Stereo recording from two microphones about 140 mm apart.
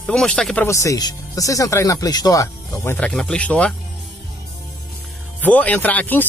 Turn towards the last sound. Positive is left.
turn(degrees=15)  # may be behind; listen again after turning